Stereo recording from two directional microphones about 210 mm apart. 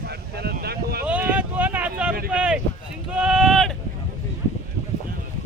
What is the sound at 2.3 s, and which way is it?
Speech, 5° right (ahead or behind).